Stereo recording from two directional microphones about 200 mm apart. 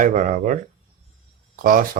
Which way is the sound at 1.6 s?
45° right (ahead or behind).